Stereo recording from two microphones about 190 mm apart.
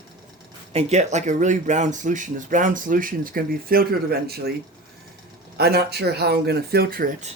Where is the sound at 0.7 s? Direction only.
35° right (ahead or behind); by 4.5 s 55° right (ahead or behind).